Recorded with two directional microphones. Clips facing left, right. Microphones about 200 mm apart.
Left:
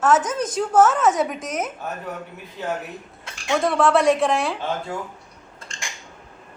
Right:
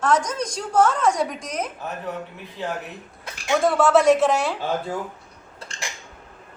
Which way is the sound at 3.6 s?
Centre (ahead or behind).